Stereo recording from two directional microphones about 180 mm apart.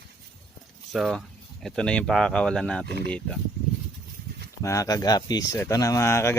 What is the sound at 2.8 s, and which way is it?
Speech, 65° right (ahead or behind).